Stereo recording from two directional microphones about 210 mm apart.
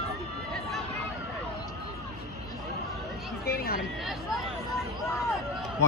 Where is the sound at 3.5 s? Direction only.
45° left (ahead or behind).